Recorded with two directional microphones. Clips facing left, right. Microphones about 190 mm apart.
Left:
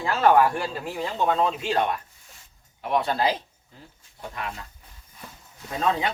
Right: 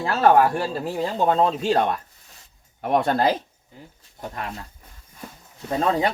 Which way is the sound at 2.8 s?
50° right (ahead or behind).